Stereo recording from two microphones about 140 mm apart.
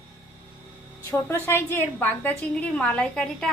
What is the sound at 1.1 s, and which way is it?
A woman's voice, 20° left (ahead or behind).